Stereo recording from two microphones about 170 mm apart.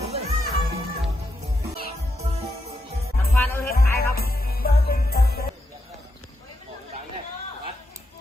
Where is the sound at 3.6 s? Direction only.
65° left (ahead or behind).